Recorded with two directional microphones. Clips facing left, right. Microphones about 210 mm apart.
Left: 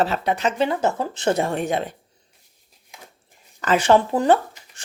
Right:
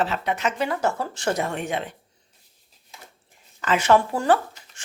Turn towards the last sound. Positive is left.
turn(degrees=20)  # may be behind; listen again after turning